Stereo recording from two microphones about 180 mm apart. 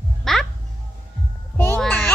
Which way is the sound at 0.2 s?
Centre (ahead or behind).